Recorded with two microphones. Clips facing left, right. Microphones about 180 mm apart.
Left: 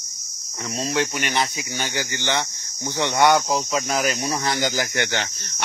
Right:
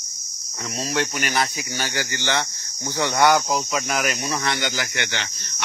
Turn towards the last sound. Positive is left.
turn(degrees=40)  # may be behind; listen again after turning